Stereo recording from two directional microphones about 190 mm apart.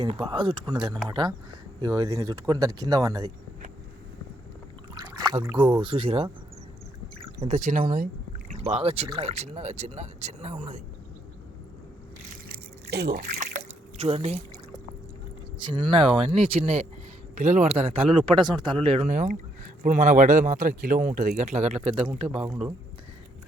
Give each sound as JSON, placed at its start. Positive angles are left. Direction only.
{"t": 0.0, "sound": "speech", "side_deg": -25}
{"t": 5.1, "sound": "a sound", "side_deg": -20}
{"t": 5.5, "sound": "speech", "side_deg": -25}
{"t": 7.4, "sound": "speech", "side_deg": -40}
{"t": 8.4, "sound": "speech", "side_deg": -35}
{"t": 12.3, "sound": "a sound", "side_deg": -55}
{"t": 14.0, "sound": "speech", "side_deg": -30}
{"t": 15.6, "sound": "speech", "side_deg": -25}